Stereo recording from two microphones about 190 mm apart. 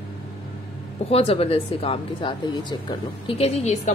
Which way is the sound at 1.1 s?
30° left (ahead or behind).